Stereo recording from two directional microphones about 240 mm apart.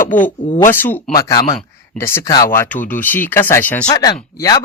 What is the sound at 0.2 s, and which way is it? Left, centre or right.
Speech, left.